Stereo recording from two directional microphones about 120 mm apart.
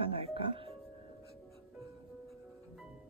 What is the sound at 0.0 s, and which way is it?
Music, 50° right (ahead or behind).